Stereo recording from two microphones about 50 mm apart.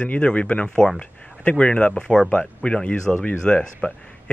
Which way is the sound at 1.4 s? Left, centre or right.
Left.